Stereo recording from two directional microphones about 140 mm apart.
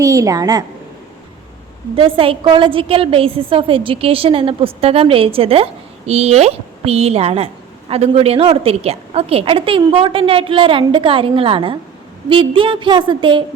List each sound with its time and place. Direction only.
0.0 s a woman's voice: 25° right (ahead or behind)
2.0 s a woman's voice: 40° right (ahead or behind)